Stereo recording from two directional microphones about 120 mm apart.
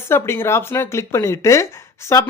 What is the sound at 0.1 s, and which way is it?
Speech, 20° left (ahead or behind).